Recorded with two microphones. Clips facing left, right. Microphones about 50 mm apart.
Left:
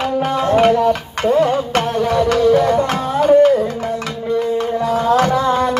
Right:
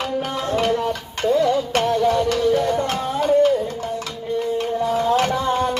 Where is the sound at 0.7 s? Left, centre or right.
Left.